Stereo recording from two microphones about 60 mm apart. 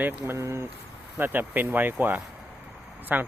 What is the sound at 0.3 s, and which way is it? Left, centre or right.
Speech, right.